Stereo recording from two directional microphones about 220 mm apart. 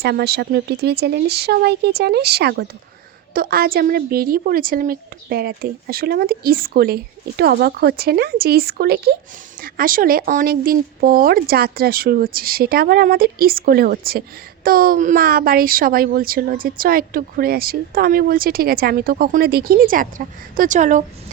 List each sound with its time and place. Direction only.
0.0 s a woman's voice: 45° right (ahead or behind)